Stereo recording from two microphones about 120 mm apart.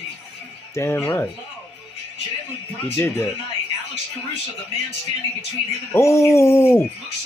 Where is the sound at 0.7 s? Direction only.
20° left (ahead or behind).